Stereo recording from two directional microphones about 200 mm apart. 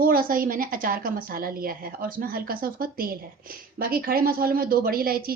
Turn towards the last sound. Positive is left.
turn(degrees=-50)  # may be behind; listen again after turning